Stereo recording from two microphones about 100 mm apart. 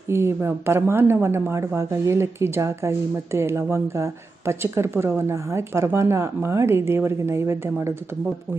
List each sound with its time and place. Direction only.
0.1 s speech: 25° right (ahead or behind)